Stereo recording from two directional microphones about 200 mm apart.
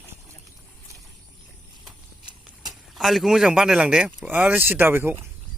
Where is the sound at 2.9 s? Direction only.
Centre (ahead or behind).